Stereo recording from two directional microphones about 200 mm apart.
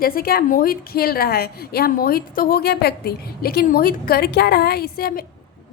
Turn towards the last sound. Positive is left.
turn(degrees=50)  # may be behind; listen again after turning